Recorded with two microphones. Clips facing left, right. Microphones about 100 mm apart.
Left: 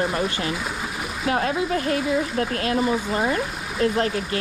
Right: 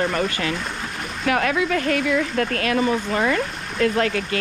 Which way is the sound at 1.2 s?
70° right (ahead or behind).